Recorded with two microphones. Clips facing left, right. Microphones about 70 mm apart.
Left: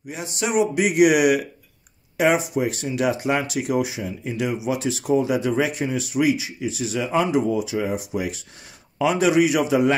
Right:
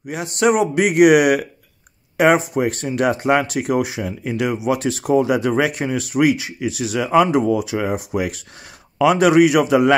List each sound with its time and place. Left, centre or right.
0.1 s speech: right